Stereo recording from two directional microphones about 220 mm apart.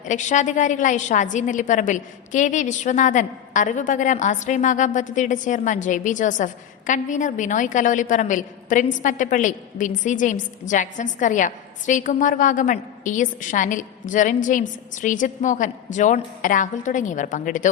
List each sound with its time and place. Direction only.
0.0 s a woman's voice: 35° left (ahead or behind)